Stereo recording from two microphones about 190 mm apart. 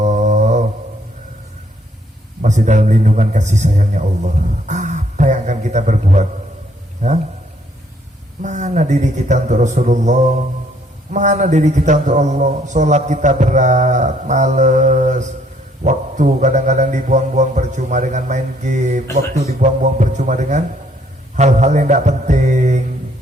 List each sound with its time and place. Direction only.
0.0 s humming: 40° right (ahead or behind)
2.4 s a man's voice: 40° right (ahead or behind)
4.7 s a sound: 40° right (ahead or behind)
7.0 s a man's voice: 40° right (ahead or behind)
8.4 s a man's voice: 40° right (ahead or behind)